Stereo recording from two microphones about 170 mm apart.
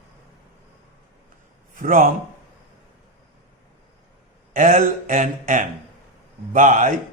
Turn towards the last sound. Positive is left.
turn(degrees=-50)  # may be behind; listen again after turning